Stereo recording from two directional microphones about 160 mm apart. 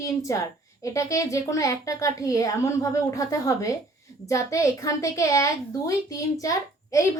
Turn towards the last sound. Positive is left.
turn(degrees=20)  # may be behind; listen again after turning